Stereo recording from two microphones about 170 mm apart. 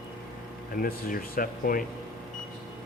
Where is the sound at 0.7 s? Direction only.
60° left (ahead or behind).